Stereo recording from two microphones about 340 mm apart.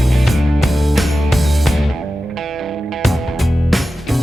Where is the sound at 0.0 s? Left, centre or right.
Centre.